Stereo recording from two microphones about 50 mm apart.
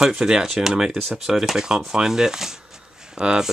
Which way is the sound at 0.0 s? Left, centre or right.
Centre.